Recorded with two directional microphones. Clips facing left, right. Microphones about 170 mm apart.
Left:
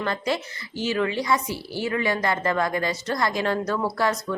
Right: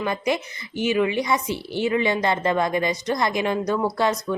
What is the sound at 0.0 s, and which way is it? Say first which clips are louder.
A woman's voice: right 2 dB; 15° right (ahead or behind).